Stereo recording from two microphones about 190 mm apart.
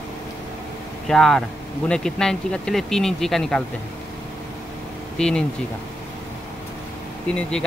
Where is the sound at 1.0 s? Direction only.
5° left (ahead or behind).